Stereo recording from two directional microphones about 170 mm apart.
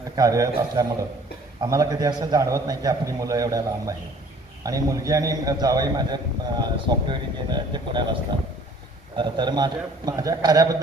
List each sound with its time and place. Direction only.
0.2 s a man's voice: 20° right (ahead or behind)
9.1 s a man's voice: 25° right (ahead or behind)